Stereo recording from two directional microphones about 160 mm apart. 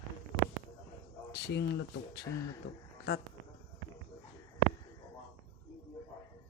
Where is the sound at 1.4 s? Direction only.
90° left.